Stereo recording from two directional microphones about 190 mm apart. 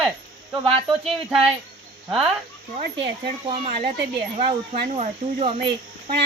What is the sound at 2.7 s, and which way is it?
Speech, 25° right (ahead or behind).